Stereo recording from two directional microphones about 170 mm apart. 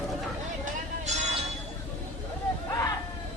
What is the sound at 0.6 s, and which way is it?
Music, 40° right (ahead or behind).